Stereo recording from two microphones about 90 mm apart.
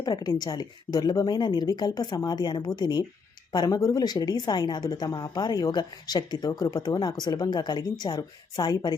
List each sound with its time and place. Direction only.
0.0 s a woman's voice: 50° left (ahead or behind)